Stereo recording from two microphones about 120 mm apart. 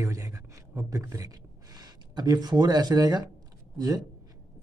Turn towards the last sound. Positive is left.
turn(degrees=-30)  # may be behind; listen again after turning